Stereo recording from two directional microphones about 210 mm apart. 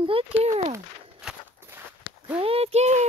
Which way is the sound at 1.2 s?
10° right (ahead or behind).